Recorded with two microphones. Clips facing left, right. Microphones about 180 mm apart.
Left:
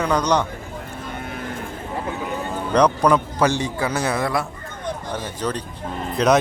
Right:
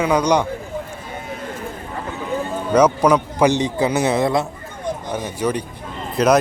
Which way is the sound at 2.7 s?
5° right (ahead or behind).